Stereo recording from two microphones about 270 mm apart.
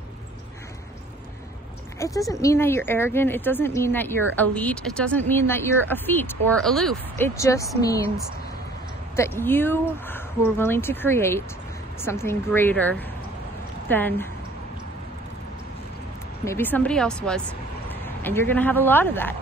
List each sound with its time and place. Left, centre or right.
2.0 s speech: centre
9.1 s speech: centre
16.4 s speech: centre